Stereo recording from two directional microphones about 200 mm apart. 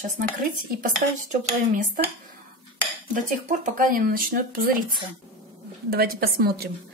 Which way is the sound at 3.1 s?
40° right (ahead or behind).